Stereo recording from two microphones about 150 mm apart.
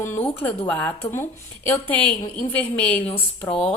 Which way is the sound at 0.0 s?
15° left (ahead or behind).